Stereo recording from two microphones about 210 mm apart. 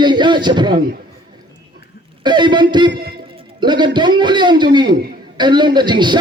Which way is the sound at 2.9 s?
50° right (ahead or behind).